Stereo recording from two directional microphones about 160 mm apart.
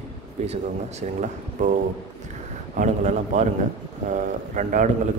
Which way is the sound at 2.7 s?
50° right (ahead or behind).